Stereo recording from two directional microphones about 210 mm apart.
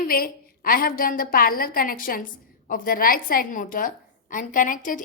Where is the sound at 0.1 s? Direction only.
45° left (ahead or behind).